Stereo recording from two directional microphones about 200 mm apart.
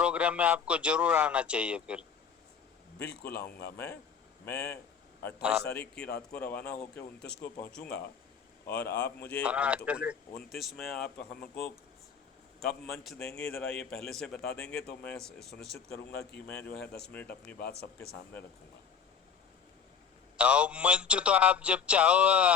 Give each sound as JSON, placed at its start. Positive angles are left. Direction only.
{"t": 0.0, "sound": "speech", "side_deg": -5}
{"t": 3.1, "sound": "a man's voice", "side_deg": 55}
{"t": 5.4, "sound": "speech", "side_deg": -5}
{"t": 6.3, "sound": "a man's voice", "side_deg": 10}
{"t": 9.4, "sound": "speech", "side_deg": -5}
{"t": 12.8, "sound": "a man's voice", "side_deg": 0}
{"t": 17.6, "sound": "a man's voice", "side_deg": 55}
{"t": 20.3, "sound": "speech", "side_deg": -5}